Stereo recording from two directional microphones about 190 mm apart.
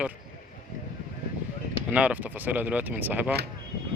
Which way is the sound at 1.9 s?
5° right (ahead or behind).